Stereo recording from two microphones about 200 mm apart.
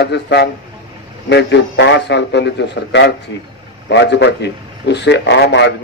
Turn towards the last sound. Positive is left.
turn(degrees=60)  # may be behind; listen again after turning